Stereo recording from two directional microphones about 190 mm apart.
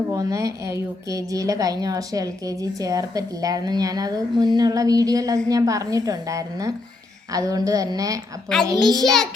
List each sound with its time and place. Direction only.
0.1 s a woman's voice: 15° right (ahead or behind)
8.5 s a child's voice: 5° left (ahead or behind)